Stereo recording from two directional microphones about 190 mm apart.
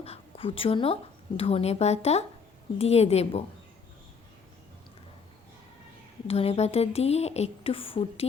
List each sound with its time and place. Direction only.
0.0 s speech: 30° left (ahead or behind)
6.2 s speech: 30° left (ahead or behind)